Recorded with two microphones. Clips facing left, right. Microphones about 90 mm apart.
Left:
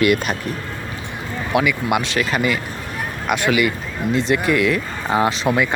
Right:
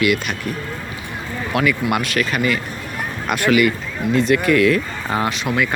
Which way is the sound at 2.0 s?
25° left (ahead or behind).